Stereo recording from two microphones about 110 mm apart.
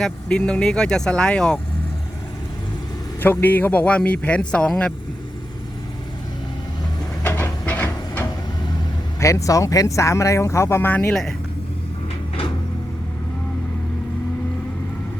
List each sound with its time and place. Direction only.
0.0 s a man's voice: 10° left (ahead or behind)
3.2 s a man's voice: 15° left (ahead or behind)
7.2 s a sound: 20° left (ahead or behind)
9.2 s speech: 30° left (ahead or behind)
11.1 s speech: 5° left (ahead or behind)